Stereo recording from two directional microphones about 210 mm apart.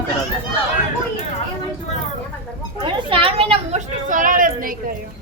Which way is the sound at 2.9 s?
25° right (ahead or behind).